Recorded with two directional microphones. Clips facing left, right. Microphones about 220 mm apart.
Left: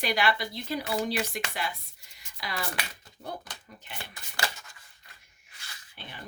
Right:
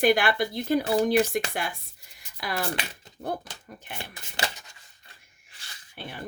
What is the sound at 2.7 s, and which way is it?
Speech, 25° right (ahead or behind).